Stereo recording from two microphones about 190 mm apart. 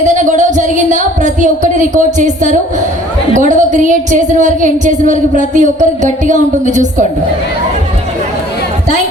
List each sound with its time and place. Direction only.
0.0 s a woman's voice: 40° right (ahead or behind)